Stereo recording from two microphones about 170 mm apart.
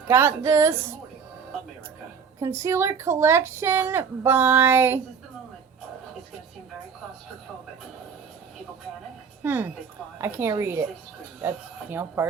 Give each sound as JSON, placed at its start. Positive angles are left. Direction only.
{"t": 0.1, "sound": "speech", "side_deg": -15}
{"t": 2.4, "sound": "speech", "side_deg": -15}
{"t": 9.4, "sound": "speech", "side_deg": -10}